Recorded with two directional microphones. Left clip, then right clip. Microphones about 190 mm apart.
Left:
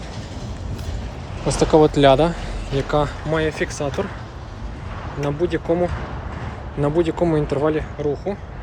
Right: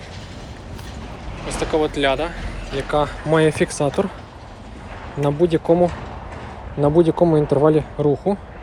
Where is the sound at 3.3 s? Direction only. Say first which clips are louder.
Right 5 dB; 15° right (ahead or behind).